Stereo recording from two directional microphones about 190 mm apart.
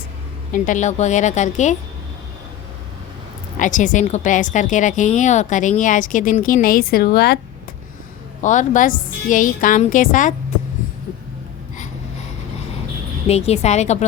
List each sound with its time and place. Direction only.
0.5 s a woman's voice: 45° left (ahead or behind)
3.6 s a woman's voice: 40° left (ahead or behind)
8.4 s a woman's voice: 40° left (ahead or behind)
13.2 s a woman's voice: 35° left (ahead or behind)